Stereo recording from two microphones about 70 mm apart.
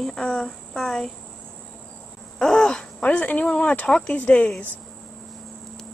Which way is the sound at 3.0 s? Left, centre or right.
Left.